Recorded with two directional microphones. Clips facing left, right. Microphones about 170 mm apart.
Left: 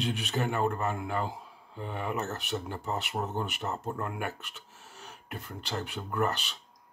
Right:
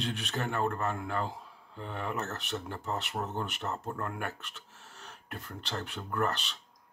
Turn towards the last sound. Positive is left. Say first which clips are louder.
# left 2 dB
turn(degrees=5)  # may be behind; listen again after turning